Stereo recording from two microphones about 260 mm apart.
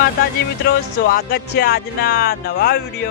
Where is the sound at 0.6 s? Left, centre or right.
Left.